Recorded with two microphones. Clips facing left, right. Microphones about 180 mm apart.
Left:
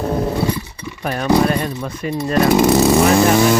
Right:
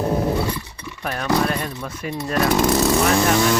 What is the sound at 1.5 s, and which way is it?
Speech, centre (ahead or behind).